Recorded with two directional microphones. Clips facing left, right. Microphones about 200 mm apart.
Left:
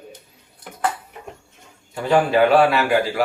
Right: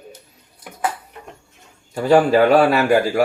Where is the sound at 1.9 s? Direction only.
40° right (ahead or behind).